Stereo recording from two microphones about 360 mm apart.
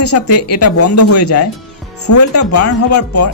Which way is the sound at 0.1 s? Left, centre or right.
Left.